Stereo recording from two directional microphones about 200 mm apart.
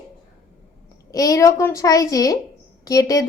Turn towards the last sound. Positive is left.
turn(degrees=15)  # may be behind; listen again after turning